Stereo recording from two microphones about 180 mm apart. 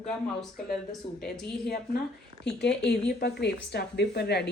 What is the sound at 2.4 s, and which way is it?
A woman's voice, 70° left (ahead or behind).